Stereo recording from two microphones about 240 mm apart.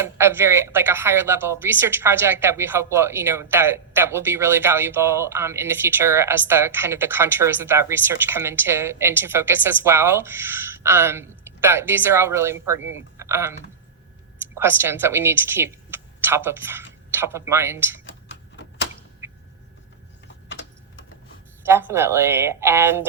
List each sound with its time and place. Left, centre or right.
0.0 s speech: centre
13.1 s a sound: centre
14.6 s a woman's voice: centre
19.2 s a sound: centre
20.5 s typing: left
21.7 s speech: centre